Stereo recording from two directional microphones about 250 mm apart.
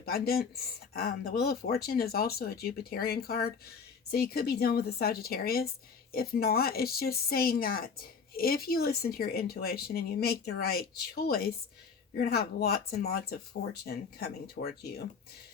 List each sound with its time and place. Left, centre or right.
0.0 s speech: left